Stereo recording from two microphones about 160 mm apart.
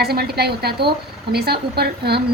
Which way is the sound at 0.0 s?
90° right.